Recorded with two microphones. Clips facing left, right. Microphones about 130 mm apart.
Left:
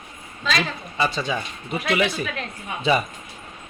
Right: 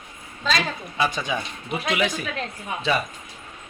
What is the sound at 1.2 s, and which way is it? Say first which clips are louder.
Speech: left 1 dB; 15° right (ahead or behind).